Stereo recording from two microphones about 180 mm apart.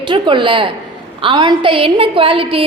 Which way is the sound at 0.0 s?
25° right (ahead or behind).